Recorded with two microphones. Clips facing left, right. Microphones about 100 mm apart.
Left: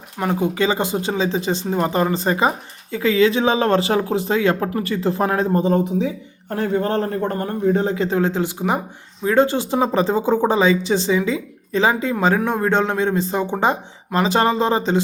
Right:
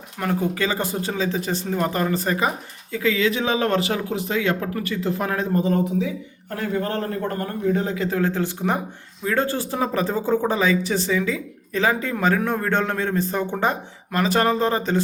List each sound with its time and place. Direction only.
0.2 s speech: 15° left (ahead or behind)